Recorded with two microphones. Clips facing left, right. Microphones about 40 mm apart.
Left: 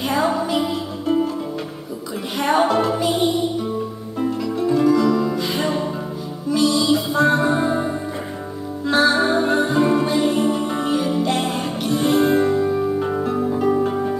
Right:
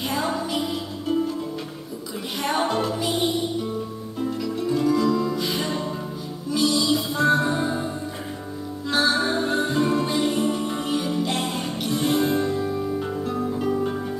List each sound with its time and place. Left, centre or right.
0.1 s music: centre
2.3 s music: centre
4.4 s music: centre